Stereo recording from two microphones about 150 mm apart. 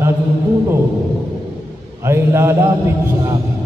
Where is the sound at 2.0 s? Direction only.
15° right (ahead or behind).